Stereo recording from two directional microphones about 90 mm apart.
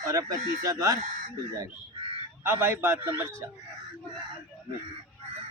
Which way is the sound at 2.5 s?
30° right (ahead or behind).